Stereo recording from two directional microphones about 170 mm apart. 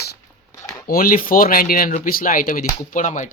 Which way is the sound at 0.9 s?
55° left (ahead or behind).